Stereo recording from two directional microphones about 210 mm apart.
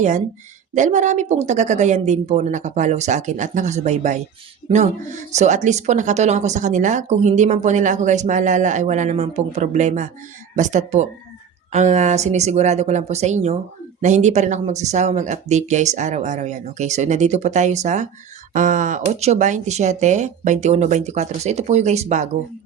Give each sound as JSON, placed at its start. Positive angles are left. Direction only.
{"t": 0.7, "sound": "speech", "side_deg": -35}